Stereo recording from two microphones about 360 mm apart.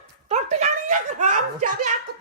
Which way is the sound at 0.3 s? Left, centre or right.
Centre.